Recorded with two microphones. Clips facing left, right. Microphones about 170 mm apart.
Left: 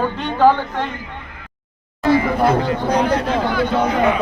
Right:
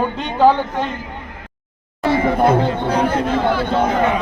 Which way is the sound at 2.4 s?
25° right (ahead or behind).